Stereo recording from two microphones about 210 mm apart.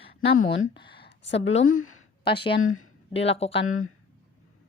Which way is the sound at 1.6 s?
80° left.